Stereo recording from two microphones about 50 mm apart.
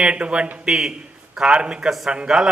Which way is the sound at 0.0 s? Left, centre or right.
Right.